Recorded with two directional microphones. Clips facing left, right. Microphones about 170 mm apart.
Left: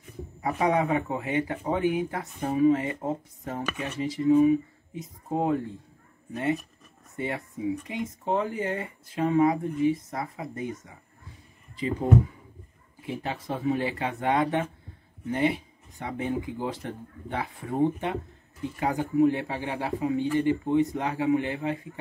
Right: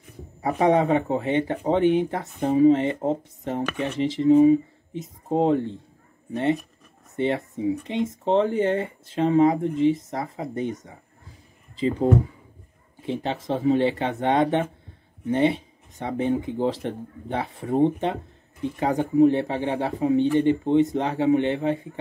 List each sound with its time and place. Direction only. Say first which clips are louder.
0.6 s speech: right 5 dB; 30° right (ahead or behind)
7.2 s speech: right 7 dB; 25° right (ahead or behind)